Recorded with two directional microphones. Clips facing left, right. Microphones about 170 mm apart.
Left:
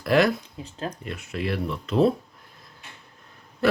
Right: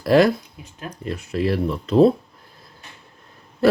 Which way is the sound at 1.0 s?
35° right (ahead or behind).